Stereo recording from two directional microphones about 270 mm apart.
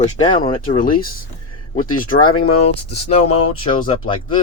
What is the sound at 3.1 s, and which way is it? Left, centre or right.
Speech, left.